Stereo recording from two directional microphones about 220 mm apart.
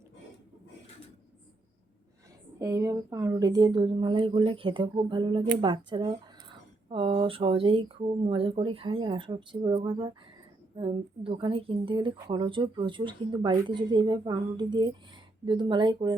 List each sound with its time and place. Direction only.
2.6 s a woman's voice: 15° right (ahead or behind)